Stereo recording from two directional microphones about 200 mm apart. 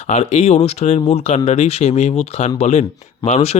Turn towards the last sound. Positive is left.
turn(degrees=30)  # may be behind; listen again after turning